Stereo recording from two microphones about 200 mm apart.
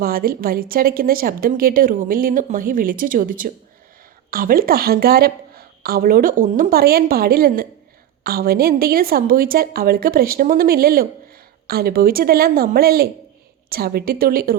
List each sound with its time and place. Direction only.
0.0 s a woman's voice: 50° right (ahead or behind)